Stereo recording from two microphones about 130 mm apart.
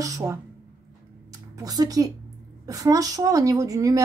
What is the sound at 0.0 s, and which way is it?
Speech, 25° right (ahead or behind).